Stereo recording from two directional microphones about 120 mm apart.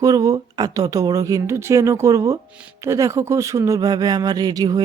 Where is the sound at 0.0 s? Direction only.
30° right (ahead or behind).